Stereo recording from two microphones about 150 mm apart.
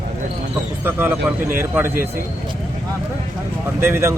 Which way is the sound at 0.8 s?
15° right (ahead or behind).